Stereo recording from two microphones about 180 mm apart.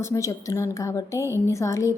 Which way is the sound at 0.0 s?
15° left (ahead or behind).